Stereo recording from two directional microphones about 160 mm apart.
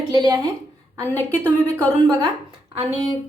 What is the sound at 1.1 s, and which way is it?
Speech, 10° left (ahead or behind).